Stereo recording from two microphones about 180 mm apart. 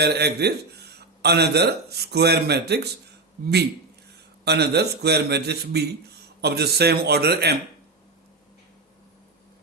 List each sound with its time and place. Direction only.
0.0 s a man's voice: 65° right (ahead or behind)
4.4 s a man's voice: 65° right (ahead or behind)